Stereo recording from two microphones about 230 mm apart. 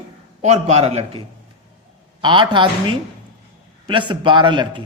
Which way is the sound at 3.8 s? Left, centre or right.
Right.